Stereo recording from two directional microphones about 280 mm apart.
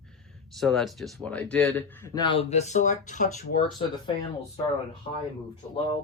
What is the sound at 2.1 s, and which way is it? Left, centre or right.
Speech, centre.